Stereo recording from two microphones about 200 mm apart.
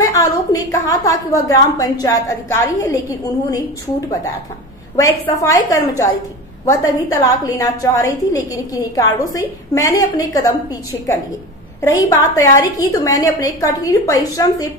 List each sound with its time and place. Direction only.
0.0 s a woman's voice: 15° left (ahead or behind)
4.9 s a woman's voice: 15° left (ahead or behind)
12.2 s a woman's voice: 15° left (ahead or behind)